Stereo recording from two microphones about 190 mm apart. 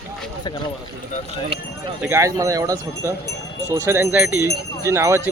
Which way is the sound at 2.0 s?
10° right (ahead or behind).